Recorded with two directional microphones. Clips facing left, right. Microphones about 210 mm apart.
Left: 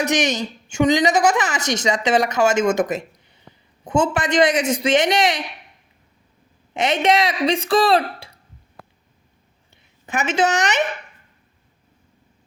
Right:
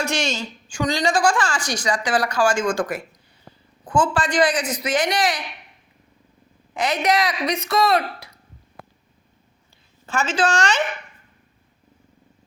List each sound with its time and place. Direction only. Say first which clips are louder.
0.0 s a woman's voice: left 4 dB; 20° left (ahead or behind)
6.7 s a woman's voice: left 3 dB; 25° left (ahead or behind)
10.1 s a woman's voice: left 2 dB; 20° left (ahead or behind)